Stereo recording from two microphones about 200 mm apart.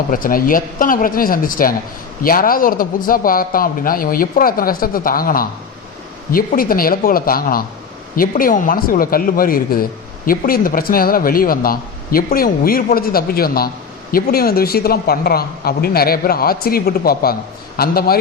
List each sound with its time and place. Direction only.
0.1 s speech: 45° left (ahead or behind)